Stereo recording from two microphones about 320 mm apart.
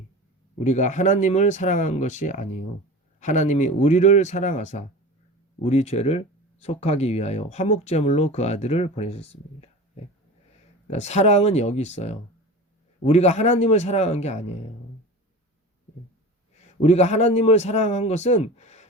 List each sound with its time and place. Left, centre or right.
0.6 s speech: left
10.8 s speech: left
16.8 s speech: centre